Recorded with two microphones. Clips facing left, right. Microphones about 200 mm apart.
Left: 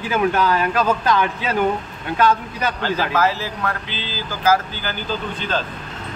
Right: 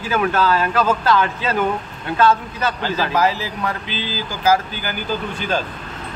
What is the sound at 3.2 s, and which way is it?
Speech, 15° right (ahead or behind).